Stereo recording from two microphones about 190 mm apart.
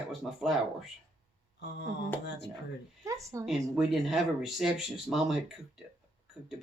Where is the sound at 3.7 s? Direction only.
Centre (ahead or behind).